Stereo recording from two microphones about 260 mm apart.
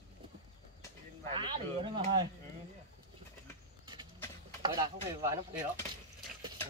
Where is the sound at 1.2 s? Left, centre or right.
Centre.